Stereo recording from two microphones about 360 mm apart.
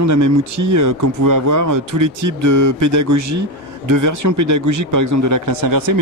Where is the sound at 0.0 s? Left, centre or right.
Right.